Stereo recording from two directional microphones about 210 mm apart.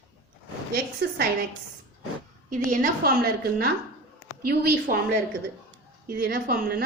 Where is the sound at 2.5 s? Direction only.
40° right (ahead or behind).